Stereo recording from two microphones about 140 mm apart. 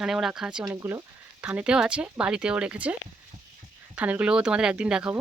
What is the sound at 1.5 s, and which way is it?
Speech, 5° right (ahead or behind).